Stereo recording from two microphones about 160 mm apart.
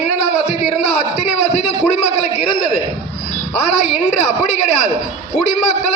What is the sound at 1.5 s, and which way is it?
A man's voice, 45° left (ahead or behind).